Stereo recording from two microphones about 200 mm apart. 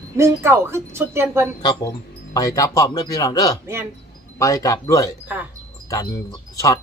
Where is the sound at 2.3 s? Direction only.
15° left (ahead or behind).